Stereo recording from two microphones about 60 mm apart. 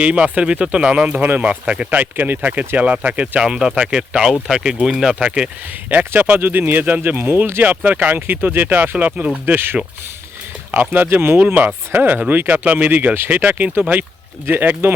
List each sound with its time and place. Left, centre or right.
0.0 s speech: centre
3.4 s speech: centre
6.1 s speech: right
7.6 s speech: right
10.7 s speech: right